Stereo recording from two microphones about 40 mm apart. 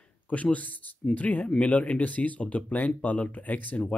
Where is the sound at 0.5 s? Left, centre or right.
Left.